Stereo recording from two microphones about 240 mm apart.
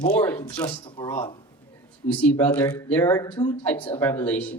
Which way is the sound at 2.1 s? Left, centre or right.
Centre.